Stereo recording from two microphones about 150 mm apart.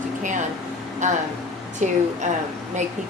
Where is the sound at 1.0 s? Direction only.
55° right (ahead or behind).